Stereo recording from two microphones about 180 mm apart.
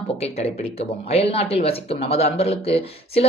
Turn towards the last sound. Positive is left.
turn(degrees=35)  # may be behind; listen again after turning